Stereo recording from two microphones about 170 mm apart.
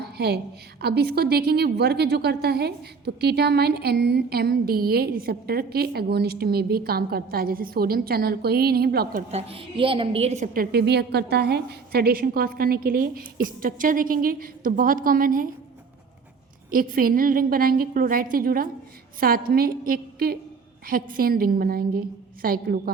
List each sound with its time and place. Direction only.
0.0 s a sound: 70° right (ahead or behind)
0.8 s a woman's voice: 70° right (ahead or behind)
9.3 s a woman's voice: 35° right (ahead or behind); by 15.5 s 55° right (ahead or behind)
16.7 s a woman's voice: 55° right (ahead or behind)